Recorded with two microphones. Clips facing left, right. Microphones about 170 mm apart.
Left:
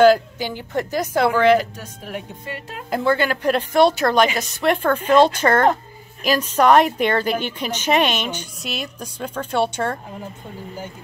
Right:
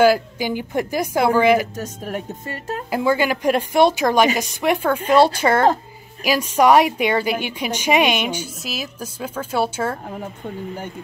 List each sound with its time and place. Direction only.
0.0 s a woman's voice: 10° right (ahead or behind)
1.8 s speech: 45° right (ahead or behind)
2.9 s a woman's voice: 10° right (ahead or behind)